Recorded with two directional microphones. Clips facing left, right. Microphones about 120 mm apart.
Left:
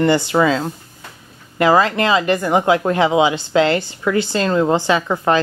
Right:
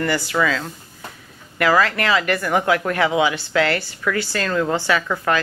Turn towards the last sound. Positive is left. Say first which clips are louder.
# left 4 dB
turn(degrees=25)  # may be behind; listen again after turning